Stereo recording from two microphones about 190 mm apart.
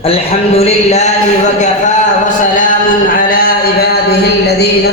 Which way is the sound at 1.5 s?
40° left (ahead or behind).